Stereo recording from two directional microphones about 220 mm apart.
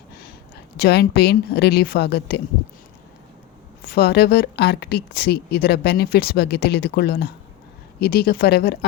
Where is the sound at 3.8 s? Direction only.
45° left (ahead or behind).